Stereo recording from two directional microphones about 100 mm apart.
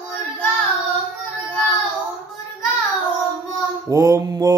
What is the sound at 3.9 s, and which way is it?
Mantra, 35° right (ahead or behind).